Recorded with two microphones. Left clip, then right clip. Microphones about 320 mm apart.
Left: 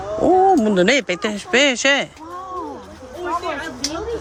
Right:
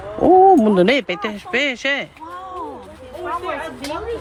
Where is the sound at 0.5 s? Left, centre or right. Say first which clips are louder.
Right 1 dB; centre.